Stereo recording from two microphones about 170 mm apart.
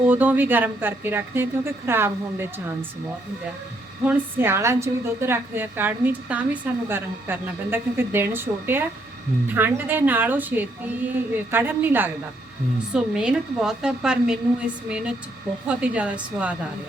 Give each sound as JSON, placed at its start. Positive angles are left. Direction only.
{"t": 0.0, "sound": "a woman's voice", "side_deg": -10}
{"t": 4.0, "sound": "a woman's voice", "side_deg": -10}